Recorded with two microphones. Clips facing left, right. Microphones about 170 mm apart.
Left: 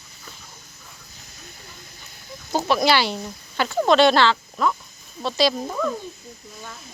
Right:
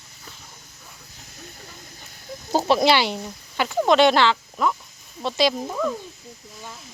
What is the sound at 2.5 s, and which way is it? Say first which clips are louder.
Speech: right 1 dB; 25° right (ahead or behind).